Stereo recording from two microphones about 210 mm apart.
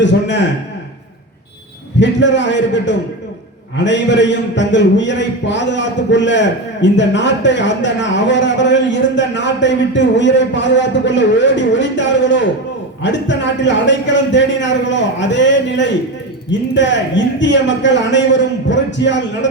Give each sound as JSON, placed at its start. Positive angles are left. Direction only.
{"t": 0.0, "sound": "a man's voice", "side_deg": 60}
{"t": 2.0, "sound": "a man's voice", "side_deg": 60}